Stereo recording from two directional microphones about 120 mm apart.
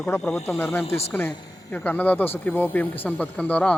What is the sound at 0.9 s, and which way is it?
Speech, 60° left (ahead or behind).